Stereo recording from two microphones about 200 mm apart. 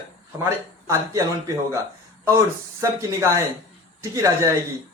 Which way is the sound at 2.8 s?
15° right (ahead or behind).